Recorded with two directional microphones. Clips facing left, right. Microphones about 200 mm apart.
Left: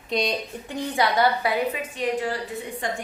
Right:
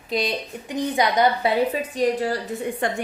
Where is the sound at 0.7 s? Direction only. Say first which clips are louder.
Right 2 dB; 20° right (ahead or behind).